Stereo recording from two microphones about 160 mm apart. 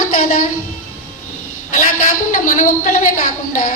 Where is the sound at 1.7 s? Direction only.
55° left (ahead or behind).